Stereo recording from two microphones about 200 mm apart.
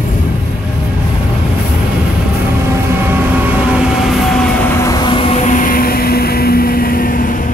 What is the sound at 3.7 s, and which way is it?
Train, 5° right (ahead or behind).